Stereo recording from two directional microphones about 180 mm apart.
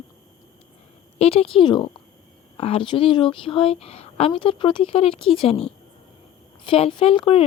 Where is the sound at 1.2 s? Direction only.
30° left (ahead or behind).